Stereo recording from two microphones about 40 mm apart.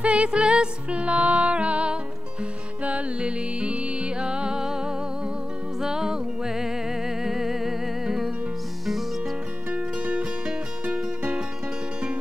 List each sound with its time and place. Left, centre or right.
0.0 s music: right; by 8.3 s centre
9.7 s music: right
10.9 s music: right